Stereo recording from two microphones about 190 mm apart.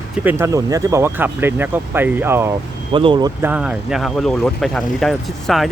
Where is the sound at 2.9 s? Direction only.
25° right (ahead or behind).